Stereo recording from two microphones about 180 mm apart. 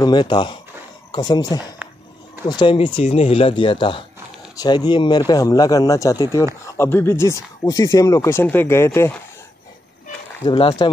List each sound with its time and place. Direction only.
0.0 s speech: 25° left (ahead or behind)
10.4 s speech: 25° left (ahead or behind)